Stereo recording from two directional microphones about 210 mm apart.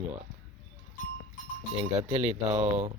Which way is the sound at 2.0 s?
30° right (ahead or behind).